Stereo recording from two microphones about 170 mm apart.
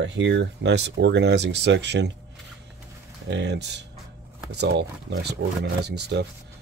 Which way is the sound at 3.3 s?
90° right.